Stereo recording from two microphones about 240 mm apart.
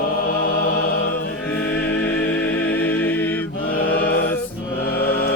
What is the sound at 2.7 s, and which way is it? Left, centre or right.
Music, centre.